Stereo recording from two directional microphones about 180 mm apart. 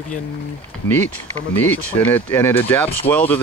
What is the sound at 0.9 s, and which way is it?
Speech, 10° left (ahead or behind).